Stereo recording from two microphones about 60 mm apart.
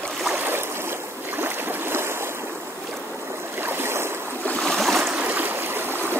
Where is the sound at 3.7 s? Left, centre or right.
Right.